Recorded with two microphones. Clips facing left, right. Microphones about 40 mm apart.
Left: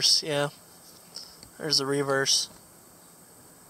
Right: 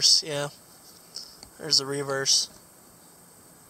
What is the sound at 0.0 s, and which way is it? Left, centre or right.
Speech, centre.